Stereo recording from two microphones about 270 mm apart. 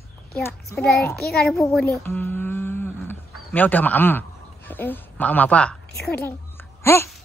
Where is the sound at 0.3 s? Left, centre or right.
Centre.